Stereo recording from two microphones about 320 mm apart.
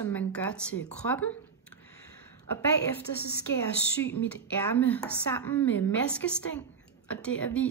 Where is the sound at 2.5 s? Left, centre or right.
Centre.